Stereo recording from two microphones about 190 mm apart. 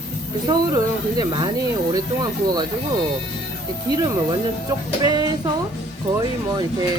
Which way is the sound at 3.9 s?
20° right (ahead or behind).